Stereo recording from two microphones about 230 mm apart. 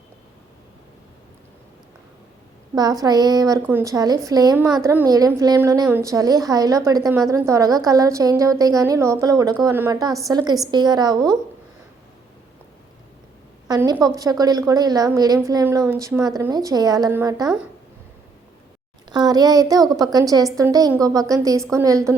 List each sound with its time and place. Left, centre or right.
3.0 s a woman's voice: centre
13.7 s a woman's voice: centre
19.1 s a woman's voice: centre